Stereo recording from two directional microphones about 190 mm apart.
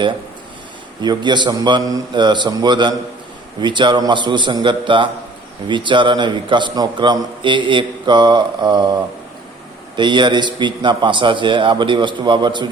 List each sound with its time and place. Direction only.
1.0 s a man's voice: 25° right (ahead or behind)